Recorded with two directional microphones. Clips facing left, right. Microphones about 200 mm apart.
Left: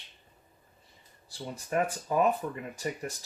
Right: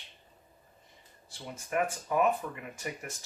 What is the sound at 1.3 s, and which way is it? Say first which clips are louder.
Speech: left 3 dB; 35° left (ahead or behind).